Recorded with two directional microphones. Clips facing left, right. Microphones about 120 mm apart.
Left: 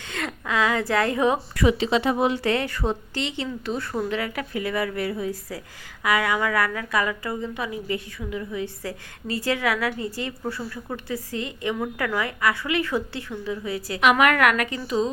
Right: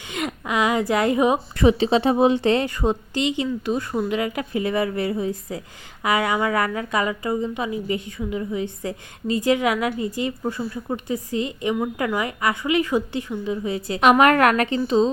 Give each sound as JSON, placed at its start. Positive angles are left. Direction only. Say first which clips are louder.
{"t": 0.1, "sound": "a woman's voice", "louder": "right 2 dB", "side_deg": -15}
{"t": 14.0, "sound": "a woman's voice", "louder": "right 4 dB", "side_deg": -35}